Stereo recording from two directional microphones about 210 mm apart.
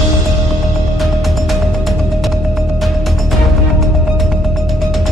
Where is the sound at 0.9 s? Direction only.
Centre (ahead or behind).